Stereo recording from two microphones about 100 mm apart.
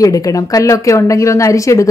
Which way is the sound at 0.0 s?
35° left (ahead or behind).